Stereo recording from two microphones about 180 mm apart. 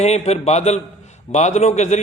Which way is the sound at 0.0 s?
35° left (ahead or behind).